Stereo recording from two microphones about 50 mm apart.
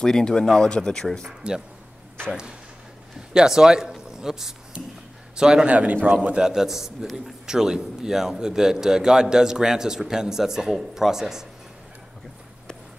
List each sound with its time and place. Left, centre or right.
0.0 s speech: centre
1.4 s a man's voice: centre
3.3 s a man's voice: centre
5.7 s a man's voice: right
6.3 s a man's voice: centre